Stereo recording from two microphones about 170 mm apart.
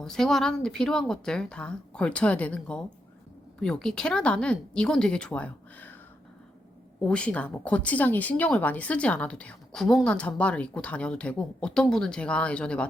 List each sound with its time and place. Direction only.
0.0 s a woman's voice: 5° left (ahead or behind)
7.0 s speech: 5° left (ahead or behind)